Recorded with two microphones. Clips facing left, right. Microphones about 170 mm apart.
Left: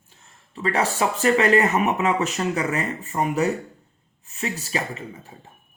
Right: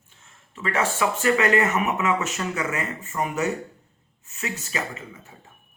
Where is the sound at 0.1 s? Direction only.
35° left (ahead or behind).